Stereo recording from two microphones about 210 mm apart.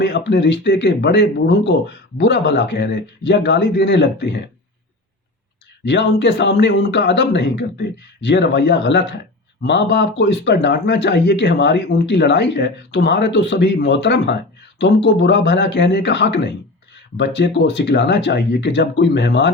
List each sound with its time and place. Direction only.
0.0 s a man's voice: 55° left (ahead or behind)
5.8 s a man's voice: 55° left (ahead or behind)